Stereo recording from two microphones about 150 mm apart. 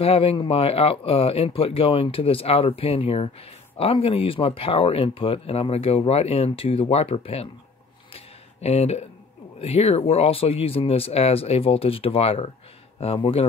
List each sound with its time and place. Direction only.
0.0 s speech: 40° left (ahead or behind)
8.1 s a sound: 45° left (ahead or behind)
9.6 s speech: 45° left (ahead or behind)